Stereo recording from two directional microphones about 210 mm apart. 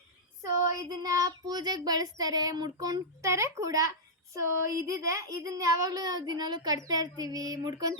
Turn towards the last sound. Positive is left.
turn(degrees=-15)  # may be behind; listen again after turning